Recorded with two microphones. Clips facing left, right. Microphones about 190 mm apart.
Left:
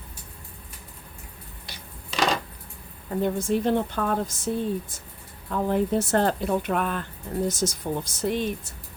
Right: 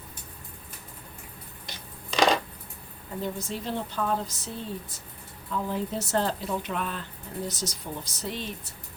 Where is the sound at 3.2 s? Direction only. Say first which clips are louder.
Left 10 dB; 55° left (ahead or behind).